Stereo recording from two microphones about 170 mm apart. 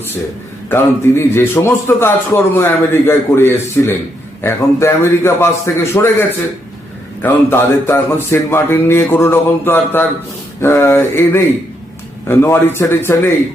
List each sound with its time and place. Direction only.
0.7 s a man's voice: 15° left (ahead or behind)